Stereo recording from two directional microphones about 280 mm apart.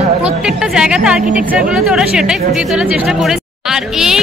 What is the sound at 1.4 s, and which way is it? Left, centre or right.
A woman's voice, centre.